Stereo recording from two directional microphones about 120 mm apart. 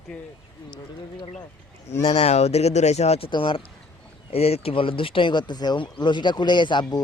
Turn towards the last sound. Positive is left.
turn(degrees=40)  # may be behind; listen again after turning